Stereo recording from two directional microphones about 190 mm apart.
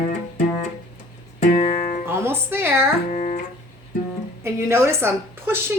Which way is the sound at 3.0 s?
40° left (ahead or behind).